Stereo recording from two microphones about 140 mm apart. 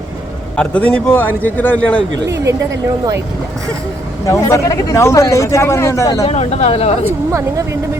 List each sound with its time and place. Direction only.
0.5 s a man's voice: 10° left (ahead or behind)
4.3 s speech: 20° left (ahead or behind)
6.2 s speech: 45° left (ahead or behind)